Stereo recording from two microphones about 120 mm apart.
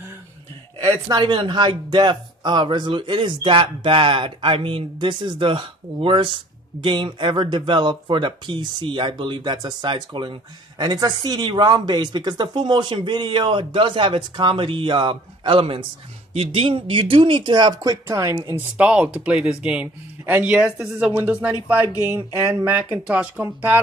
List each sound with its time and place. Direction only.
0.8 s speech: 40° right (ahead or behind)
18.6 s speech: 10° right (ahead or behind)
22.1 s a sound: 25° right (ahead or behind)
22.8 s speech: 10° right (ahead or behind)